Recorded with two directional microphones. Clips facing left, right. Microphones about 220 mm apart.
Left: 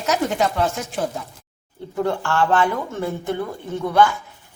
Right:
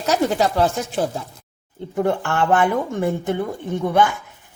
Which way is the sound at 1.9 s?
15° right (ahead or behind).